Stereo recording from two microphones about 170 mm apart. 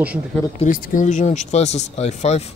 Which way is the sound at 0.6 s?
50° left (ahead or behind).